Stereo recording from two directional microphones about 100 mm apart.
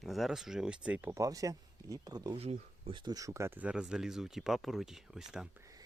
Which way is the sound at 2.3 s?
80° right.